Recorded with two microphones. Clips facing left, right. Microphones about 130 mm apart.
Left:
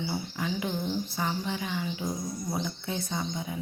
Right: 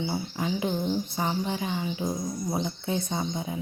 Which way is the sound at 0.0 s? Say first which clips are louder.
Right 3 dB; 25° right (ahead or behind).